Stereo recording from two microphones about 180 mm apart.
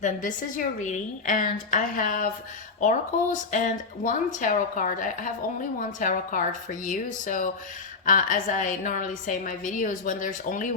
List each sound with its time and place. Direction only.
0.0 s a woman's voice: 45° left (ahead or behind)